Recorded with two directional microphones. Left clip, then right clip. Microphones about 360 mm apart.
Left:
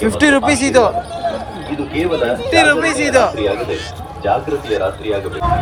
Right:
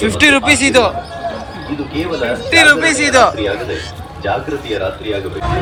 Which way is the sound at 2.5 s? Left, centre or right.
Centre.